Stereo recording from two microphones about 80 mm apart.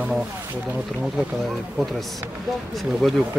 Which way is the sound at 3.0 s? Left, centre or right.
Centre.